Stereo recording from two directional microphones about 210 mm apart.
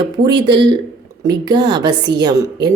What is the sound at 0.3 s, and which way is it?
A woman's voice, 20° right (ahead or behind).